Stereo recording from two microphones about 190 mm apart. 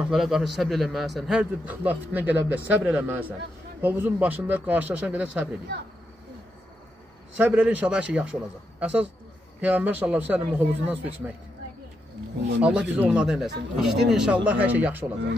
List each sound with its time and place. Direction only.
0.0 s a man's voice: centre (ahead or behind)
7.3 s speech: 10° right (ahead or behind)
12.6 s speech: 5° right (ahead or behind)